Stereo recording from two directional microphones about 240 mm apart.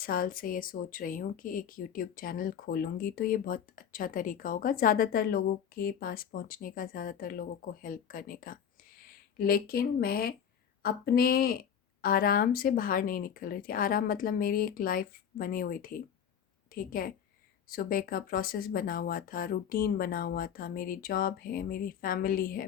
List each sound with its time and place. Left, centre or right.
0.0 s a woman's voice: left